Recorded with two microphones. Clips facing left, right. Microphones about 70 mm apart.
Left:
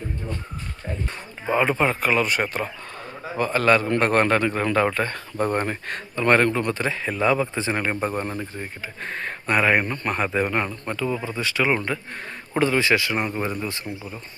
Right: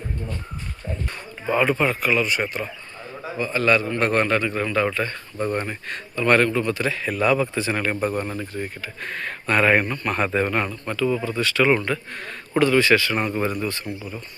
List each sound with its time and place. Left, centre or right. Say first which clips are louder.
1.5 s speech: even; left
6.2 s speech: even; left
9.5 s speech: right 1 dB; centre
9.8 s speech: right 1 dB; left
10.1 s speech: right 1 dB; centre